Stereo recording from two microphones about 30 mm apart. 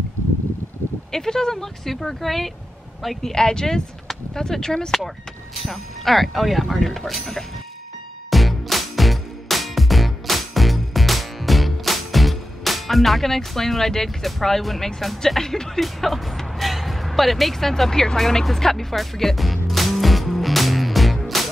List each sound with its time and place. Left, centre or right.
1.1 s speech: centre
1.9 s speech: centre
3.2 s speech: centre
5.5 s speech: centre
8.3 s music: centre
15.0 s speech: centre
15.8 s speech: centre
18.1 s music: centre